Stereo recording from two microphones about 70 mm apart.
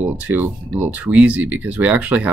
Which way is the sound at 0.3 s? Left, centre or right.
Right.